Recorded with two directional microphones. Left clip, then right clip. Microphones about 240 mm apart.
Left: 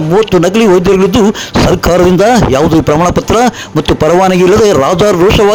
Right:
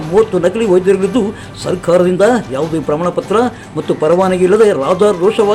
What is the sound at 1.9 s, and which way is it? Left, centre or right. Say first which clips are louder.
Speech: left 1 dB; left.